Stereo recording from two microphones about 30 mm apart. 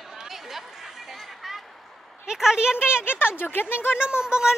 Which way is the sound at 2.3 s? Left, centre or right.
Right.